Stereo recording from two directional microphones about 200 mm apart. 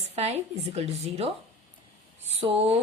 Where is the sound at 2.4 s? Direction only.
30° right (ahead or behind).